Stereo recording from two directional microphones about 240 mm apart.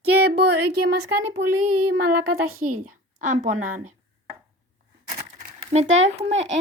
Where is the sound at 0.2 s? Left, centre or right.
Right.